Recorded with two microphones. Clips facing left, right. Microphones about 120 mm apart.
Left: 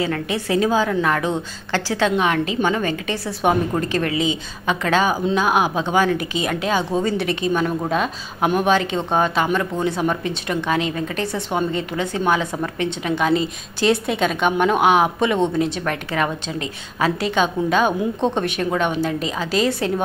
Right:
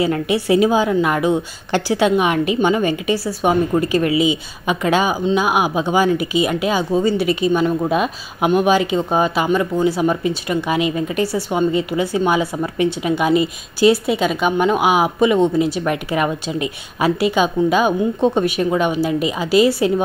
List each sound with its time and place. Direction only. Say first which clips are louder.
0.0 s a woman's voice: right 5 dB; 15° right (ahead or behind)